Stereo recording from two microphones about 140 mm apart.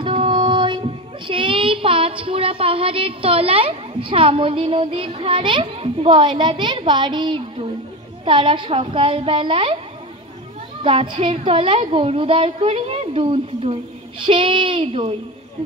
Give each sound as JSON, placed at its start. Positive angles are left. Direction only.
{"t": 0.0, "sound": "a woman's voice", "side_deg": -40}
{"t": 10.8, "sound": "a woman's voice", "side_deg": -40}